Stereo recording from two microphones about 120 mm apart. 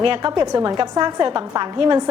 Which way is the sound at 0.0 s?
45° right (ahead or behind).